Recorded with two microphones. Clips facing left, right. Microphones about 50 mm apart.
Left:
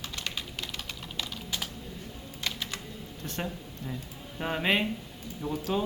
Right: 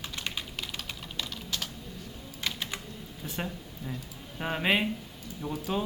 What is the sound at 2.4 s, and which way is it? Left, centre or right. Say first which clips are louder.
Typing: right 1 dB; centre.